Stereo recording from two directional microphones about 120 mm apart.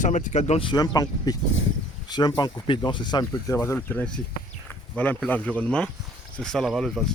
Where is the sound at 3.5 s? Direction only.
25° left (ahead or behind).